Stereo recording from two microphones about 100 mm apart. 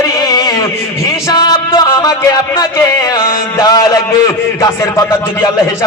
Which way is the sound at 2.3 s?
35° left (ahead or behind).